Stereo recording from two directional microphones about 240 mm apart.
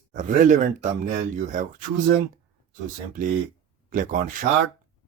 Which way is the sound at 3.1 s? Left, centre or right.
Right.